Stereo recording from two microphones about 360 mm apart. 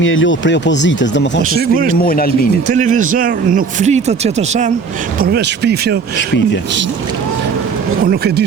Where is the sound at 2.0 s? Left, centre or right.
Left.